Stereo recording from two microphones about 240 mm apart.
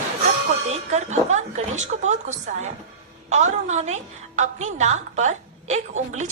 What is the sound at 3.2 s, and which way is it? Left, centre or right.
A woman's voice, right.